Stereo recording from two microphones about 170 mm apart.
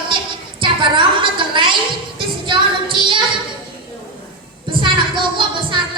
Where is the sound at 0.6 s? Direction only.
30° right (ahead or behind).